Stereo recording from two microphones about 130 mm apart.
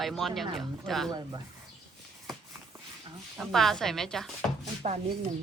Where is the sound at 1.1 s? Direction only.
30° right (ahead or behind).